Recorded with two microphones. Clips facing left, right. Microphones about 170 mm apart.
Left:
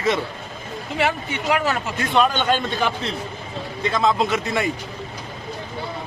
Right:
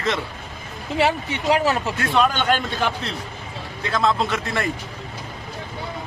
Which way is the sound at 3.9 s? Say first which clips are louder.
Left 1 dB; centre (ahead or behind).